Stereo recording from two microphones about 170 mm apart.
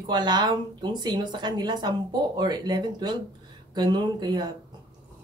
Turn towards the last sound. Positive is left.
turn(degrees=-25)  # may be behind; listen again after turning